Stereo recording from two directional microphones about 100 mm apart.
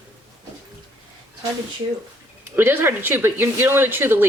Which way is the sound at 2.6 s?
20° right (ahead or behind).